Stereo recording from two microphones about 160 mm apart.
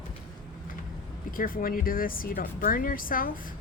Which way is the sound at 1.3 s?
60° left (ahead or behind).